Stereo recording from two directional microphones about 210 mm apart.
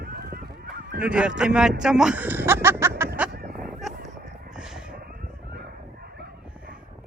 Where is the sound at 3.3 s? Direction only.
45° right (ahead or behind).